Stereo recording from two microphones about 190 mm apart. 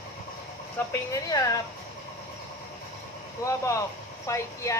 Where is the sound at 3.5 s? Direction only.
15° left (ahead or behind).